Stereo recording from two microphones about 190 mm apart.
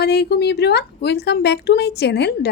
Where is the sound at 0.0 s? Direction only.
60° left (ahead or behind).